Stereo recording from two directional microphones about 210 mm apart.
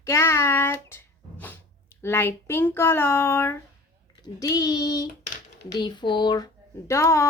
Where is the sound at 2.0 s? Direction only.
10° left (ahead or behind).